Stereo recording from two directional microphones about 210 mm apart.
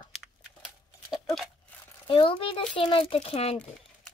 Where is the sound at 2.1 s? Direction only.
25° left (ahead or behind).